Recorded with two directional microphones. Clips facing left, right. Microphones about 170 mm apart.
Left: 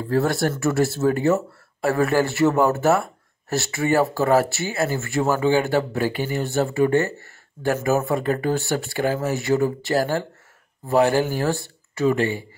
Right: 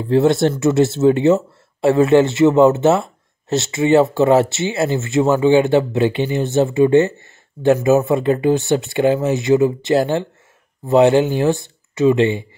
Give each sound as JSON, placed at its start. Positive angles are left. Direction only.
{"t": 0.1, "sound": "speech", "side_deg": -20}